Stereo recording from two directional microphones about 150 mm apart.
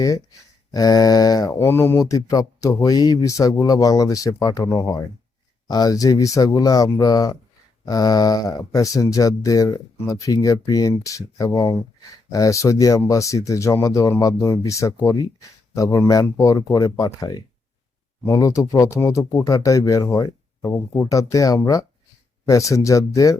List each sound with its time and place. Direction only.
0.7 s speech: 25° left (ahead or behind)